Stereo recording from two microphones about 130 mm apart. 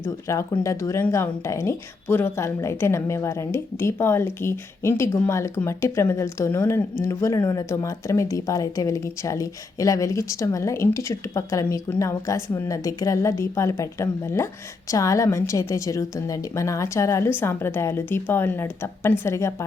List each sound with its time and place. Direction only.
0.0 s speech: 25° left (ahead or behind)